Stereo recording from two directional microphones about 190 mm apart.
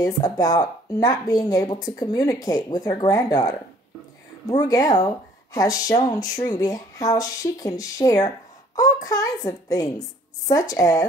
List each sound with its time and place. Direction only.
0.0 s speech: 20° left (ahead or behind)